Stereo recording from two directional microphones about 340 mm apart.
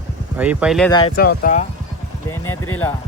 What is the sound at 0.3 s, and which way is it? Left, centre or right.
Speech, centre.